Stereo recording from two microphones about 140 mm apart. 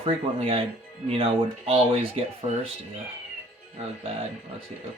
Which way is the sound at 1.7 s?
45° right (ahead or behind).